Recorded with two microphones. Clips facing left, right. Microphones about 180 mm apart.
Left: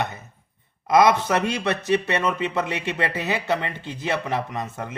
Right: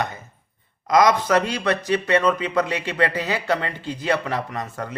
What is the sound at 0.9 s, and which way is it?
Speech, 25° left (ahead or behind).